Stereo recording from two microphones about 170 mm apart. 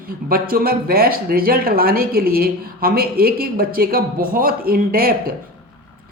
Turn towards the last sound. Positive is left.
turn(degrees=-60)  # may be behind; listen again after turning